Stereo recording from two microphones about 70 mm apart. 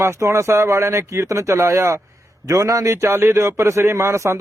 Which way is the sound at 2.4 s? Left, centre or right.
Right.